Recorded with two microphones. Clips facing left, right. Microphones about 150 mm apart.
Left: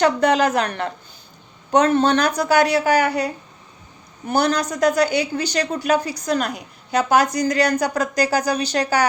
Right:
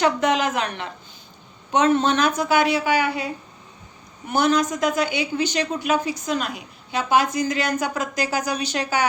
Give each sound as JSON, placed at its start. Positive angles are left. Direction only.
{"t": 0.0, "sound": "a woman's voice", "side_deg": 35}
{"t": 4.3, "sound": "a woman's voice", "side_deg": 35}